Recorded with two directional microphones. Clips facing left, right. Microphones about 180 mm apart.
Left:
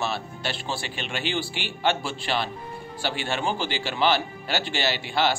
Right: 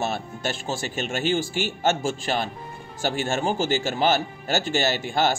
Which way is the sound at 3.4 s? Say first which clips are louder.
Right 4 dB; 45° right (ahead or behind).